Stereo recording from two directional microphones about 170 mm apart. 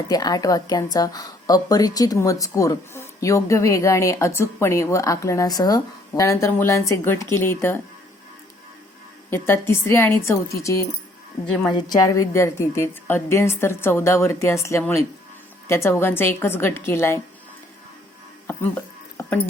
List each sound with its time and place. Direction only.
0.1 s a woman's voice: 20° left (ahead or behind)
9.3 s a woman's voice: 15° left (ahead or behind)
11.9 s a woman's voice: 20° left (ahead or behind)